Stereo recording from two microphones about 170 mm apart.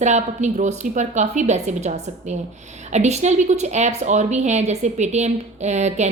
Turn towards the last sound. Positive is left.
turn(degrees=-40)  # may be behind; listen again after turning